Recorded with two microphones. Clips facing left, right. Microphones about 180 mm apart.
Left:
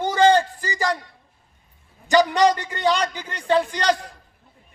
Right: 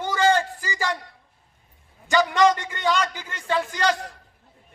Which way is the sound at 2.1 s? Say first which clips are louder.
Left 2 dB; 35° left (ahead or behind).